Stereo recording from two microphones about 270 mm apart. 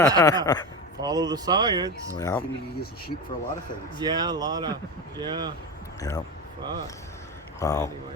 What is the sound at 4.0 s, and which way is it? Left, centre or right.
Speech, centre.